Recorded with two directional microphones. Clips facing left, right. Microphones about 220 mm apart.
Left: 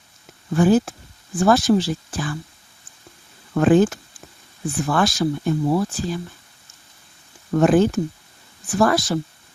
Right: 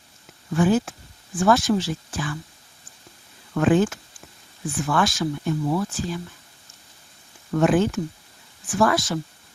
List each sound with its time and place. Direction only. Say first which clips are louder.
0.5 s speech: left 4 dB; 40° left (ahead or behind)
3.5 s speech: left 4 dB; 40° left (ahead or behind)
7.5 s speech: left 4 dB; 40° left (ahead or behind)